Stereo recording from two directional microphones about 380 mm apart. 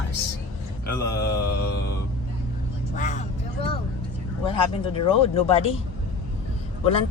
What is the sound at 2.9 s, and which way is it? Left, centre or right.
Vehicle, centre.